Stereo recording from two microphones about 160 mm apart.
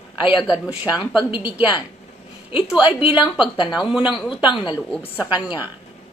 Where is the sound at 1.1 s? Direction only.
30° left (ahead or behind).